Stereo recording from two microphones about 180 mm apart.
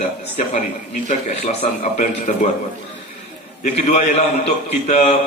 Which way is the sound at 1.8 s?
45° left (ahead or behind).